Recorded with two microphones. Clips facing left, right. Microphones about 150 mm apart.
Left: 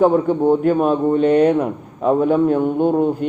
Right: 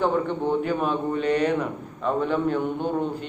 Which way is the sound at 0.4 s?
45° left (ahead or behind).